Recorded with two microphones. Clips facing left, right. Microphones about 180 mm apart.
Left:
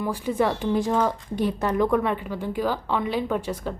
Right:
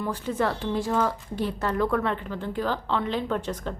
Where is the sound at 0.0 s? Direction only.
10° left (ahead or behind).